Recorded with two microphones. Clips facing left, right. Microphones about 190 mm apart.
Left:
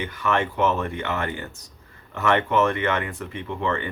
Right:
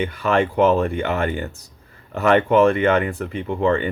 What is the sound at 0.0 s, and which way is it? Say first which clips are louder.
Speech: right 5 dB; 30° right (ahead or behind).